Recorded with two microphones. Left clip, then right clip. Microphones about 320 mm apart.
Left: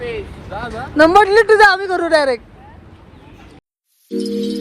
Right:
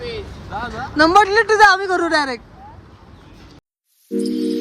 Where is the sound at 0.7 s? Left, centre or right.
Centre.